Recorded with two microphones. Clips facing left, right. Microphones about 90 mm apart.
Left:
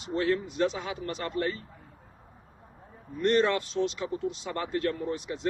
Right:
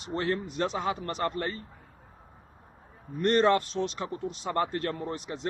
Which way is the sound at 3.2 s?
45° right (ahead or behind).